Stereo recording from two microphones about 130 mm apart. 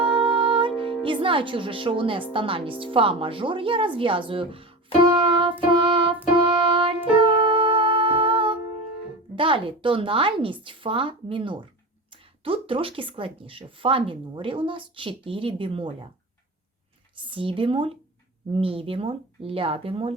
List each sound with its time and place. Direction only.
0.0 s music: 40° right (ahead or behind)
0.8 s speech: 40° right (ahead or behind)
5.1 s music: 40° right (ahead or behind)
9.3 s speech: 40° right (ahead or behind)
17.2 s speech: 40° right (ahead or behind)